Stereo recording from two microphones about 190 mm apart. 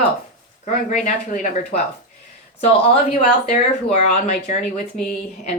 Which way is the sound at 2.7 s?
30° left (ahead or behind).